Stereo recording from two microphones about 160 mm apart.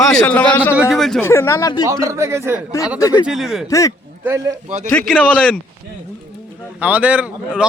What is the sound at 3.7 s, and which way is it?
Speech, 20° left (ahead or behind).